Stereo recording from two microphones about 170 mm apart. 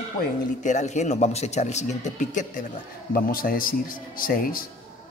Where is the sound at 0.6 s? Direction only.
45° left (ahead or behind).